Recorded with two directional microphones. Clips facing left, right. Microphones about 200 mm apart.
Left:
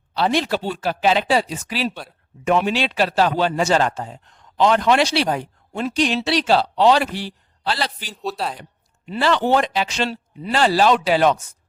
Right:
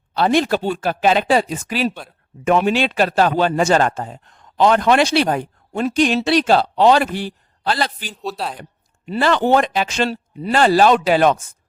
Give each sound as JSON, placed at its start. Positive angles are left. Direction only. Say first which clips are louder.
{"t": 0.1, "sound": "a man's voice", "louder": "right 4 dB", "side_deg": -50}
{"t": 8.1, "sound": "a man's voice", "louder": "even", "side_deg": 0}
{"t": 9.0, "sound": "a man's voice", "louder": "right 2 dB", "side_deg": -50}